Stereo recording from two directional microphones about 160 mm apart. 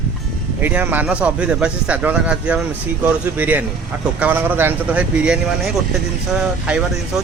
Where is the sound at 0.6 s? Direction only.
10° right (ahead or behind).